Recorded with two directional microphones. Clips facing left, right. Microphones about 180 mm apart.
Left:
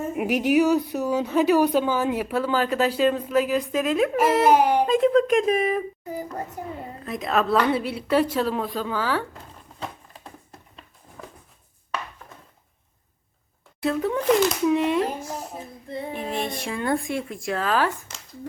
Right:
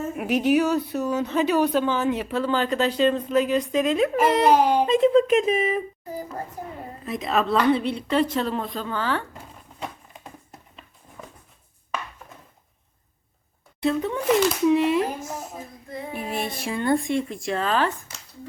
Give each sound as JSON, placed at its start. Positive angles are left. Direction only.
{"t": 0.2, "sound": "speech", "side_deg": 15}
{"t": 4.9, "sound": "speech", "side_deg": 0}
{"t": 7.0, "sound": "speech", "side_deg": 0}
{"t": 13.8, "sound": "speech", "side_deg": 0}
{"t": 15.2, "sound": "child singing", "side_deg": 30}
{"t": 16.3, "sound": "speech", "side_deg": -5}